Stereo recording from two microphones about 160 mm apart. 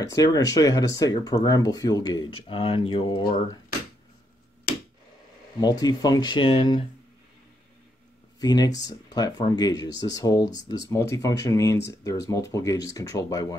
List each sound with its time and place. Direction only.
0.1 s speech: 20° left (ahead or behind)
5.6 s speech: 25° left (ahead or behind)
8.4 s speech: 25° left (ahead or behind)